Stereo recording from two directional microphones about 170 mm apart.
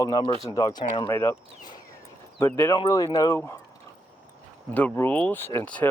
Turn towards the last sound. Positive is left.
turn(degrees=10)  # may be behind; listen again after turning